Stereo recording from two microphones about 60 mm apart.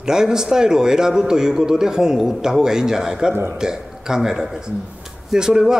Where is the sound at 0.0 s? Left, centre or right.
Centre.